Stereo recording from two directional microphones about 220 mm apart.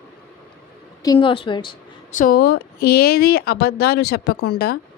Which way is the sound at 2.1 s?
40° left (ahead or behind).